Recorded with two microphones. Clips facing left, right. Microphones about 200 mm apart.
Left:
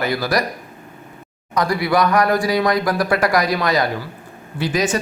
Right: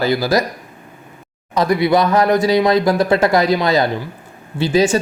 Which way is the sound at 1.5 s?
25° right (ahead or behind).